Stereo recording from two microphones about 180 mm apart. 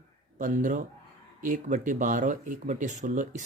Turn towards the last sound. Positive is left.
turn(degrees=-45)  # may be behind; listen again after turning